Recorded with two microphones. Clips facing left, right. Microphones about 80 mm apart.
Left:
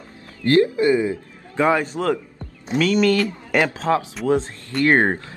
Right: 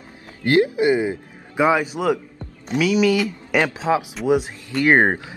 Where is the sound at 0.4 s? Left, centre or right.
Centre.